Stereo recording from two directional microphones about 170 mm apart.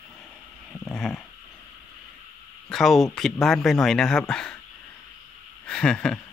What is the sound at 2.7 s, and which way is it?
Speech, centre (ahead or behind).